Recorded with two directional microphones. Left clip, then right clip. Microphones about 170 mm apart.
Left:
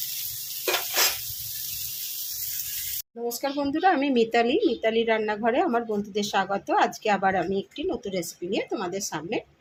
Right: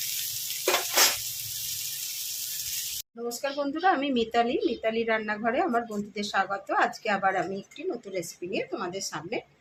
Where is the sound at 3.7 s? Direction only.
25° left (ahead or behind).